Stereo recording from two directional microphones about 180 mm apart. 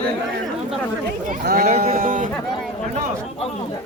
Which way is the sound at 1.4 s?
55° right (ahead or behind).